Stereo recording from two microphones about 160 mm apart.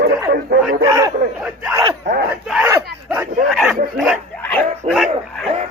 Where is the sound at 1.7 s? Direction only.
25° right (ahead or behind).